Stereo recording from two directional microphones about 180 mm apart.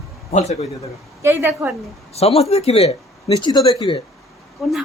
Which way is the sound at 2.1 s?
35° left (ahead or behind).